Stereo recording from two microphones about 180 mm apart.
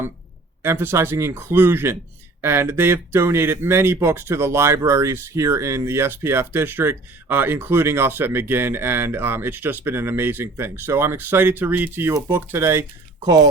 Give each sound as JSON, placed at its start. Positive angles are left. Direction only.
{"t": 0.6, "sound": "speech", "side_deg": -15}